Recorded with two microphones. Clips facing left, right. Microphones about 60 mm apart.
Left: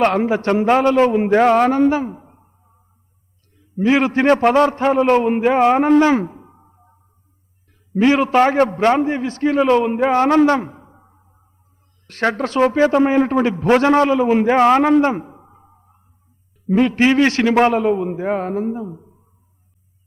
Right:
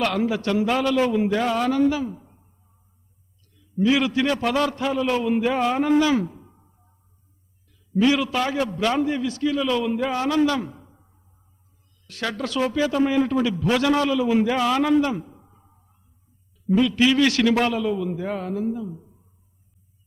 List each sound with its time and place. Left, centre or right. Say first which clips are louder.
0.0 s a man's voice: left 7 dB; left
15.0 s a sound: left 7 dB; left
16.6 s a man's voice: left 4 dB; left